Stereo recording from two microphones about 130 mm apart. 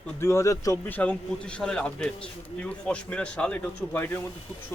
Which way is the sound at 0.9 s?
10° left (ahead or behind).